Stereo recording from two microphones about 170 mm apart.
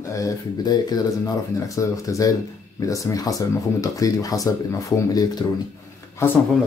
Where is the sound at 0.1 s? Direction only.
20° left (ahead or behind).